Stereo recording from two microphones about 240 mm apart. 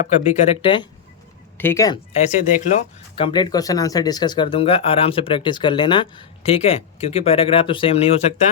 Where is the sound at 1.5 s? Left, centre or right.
Centre.